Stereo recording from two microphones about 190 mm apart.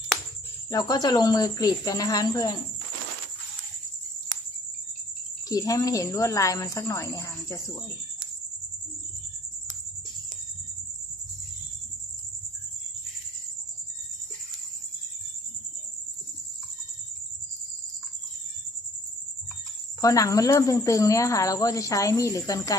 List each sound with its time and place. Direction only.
0.7 s a woman's voice: 20° left (ahead or behind)
5.5 s a woman's voice: 20° left (ahead or behind)
20.0 s a woman's voice: 15° left (ahead or behind)